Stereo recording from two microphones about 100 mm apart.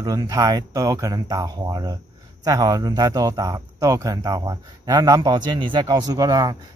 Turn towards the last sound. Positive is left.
turn(degrees=-40)  # may be behind; listen again after turning